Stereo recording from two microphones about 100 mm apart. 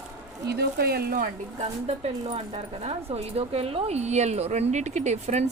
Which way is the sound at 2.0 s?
90° right.